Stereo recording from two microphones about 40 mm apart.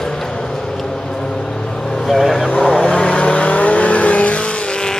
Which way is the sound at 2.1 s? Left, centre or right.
Centre.